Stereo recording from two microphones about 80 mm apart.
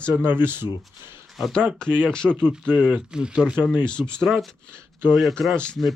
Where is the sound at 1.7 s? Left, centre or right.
Centre.